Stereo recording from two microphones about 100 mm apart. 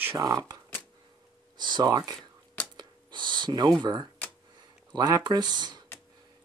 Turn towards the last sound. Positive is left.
turn(degrees=-45)  # may be behind; listen again after turning